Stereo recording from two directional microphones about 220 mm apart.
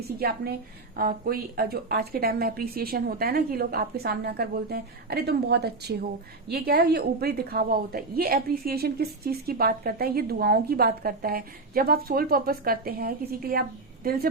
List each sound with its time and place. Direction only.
0.2 s a woman's voice: 45° right (ahead or behind)